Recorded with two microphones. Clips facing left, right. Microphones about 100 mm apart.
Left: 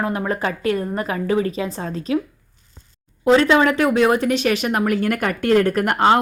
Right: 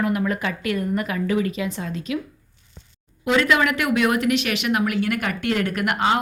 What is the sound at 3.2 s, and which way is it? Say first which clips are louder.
Speech: left 5 dB; 30° left (ahead or behind).